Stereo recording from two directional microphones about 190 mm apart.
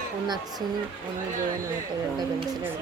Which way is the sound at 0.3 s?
20° right (ahead or behind).